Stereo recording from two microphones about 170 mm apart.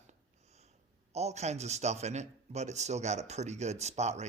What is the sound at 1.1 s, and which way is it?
A man's voice, 40° right (ahead or behind).